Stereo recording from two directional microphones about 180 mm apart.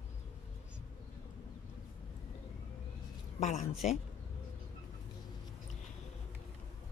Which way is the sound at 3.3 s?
40° left (ahead or behind).